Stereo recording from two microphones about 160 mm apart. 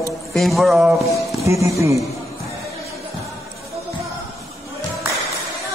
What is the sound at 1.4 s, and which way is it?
Speech, 20° right (ahead or behind).